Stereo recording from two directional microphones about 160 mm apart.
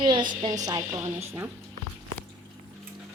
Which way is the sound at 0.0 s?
30° right (ahead or behind).